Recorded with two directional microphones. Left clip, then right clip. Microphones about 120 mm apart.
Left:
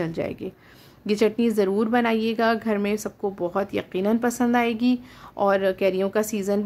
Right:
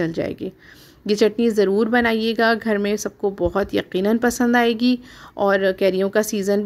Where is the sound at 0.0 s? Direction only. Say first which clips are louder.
Right 4 dB; 25° right (ahead or behind).